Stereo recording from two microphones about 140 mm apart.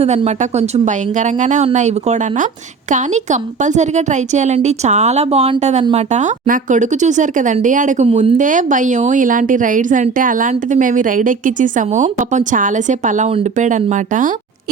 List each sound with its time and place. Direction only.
0.0 s a woman's voice: 50° right (ahead or behind); by 8.0 s 65° right (ahead or behind)
8.0 s a woman's voice: 50° right (ahead or behind); by 14.3 s 65° right (ahead or behind)